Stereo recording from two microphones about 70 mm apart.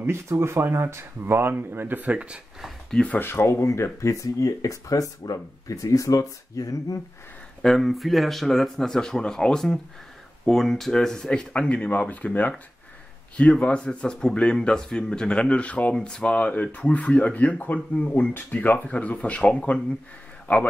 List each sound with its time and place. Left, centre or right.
0.0 s speech: right; by 2.4 s centre
2.9 s speech: centre
3.2 s speech: left
7.6 s speech: centre; by 20.6 s left